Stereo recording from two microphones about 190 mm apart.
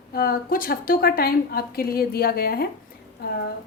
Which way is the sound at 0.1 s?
50° left (ahead or behind).